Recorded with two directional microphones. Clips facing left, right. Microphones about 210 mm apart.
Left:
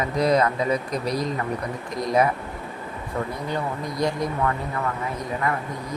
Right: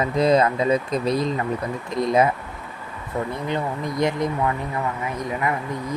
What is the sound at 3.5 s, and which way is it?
A man's voice, 20° right (ahead or behind).